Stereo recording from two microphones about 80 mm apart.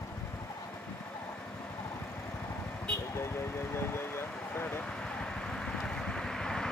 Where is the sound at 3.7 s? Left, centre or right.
Left.